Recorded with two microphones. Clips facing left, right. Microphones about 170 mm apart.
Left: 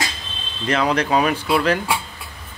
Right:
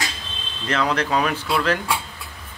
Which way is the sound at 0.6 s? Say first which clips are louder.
Left 3 dB; 15° left (ahead or behind).